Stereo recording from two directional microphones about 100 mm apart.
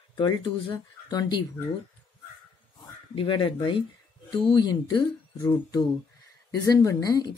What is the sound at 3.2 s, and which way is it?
Speech, 60° left (ahead or behind).